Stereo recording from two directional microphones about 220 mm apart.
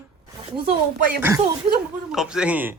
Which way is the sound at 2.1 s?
5° right (ahead or behind).